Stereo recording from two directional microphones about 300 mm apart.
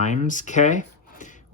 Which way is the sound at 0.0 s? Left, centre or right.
Left.